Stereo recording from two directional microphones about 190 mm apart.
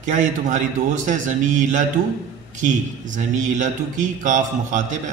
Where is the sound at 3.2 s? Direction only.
40° right (ahead or behind).